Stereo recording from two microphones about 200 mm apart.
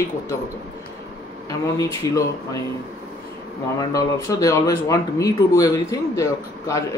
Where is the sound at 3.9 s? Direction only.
15° left (ahead or behind).